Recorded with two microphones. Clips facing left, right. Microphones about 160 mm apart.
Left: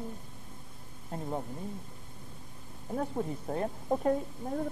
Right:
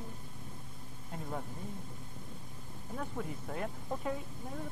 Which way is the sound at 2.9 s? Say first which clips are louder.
Left 7 dB; 35° left (ahead or behind).